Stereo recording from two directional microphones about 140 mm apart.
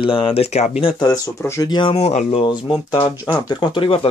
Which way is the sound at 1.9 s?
55° left (ahead or behind).